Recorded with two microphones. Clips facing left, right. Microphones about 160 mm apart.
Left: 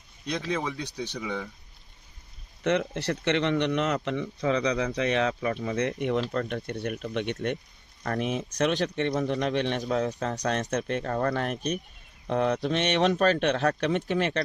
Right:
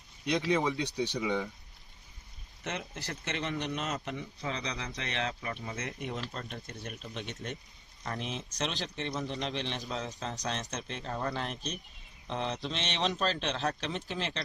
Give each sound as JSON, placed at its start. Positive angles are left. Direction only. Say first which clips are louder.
{"t": 0.3, "sound": "speech", "louder": "right 1 dB", "side_deg": -15}
{"t": 2.6, "sound": "speech", "louder": "left 13 dB", "side_deg": 65}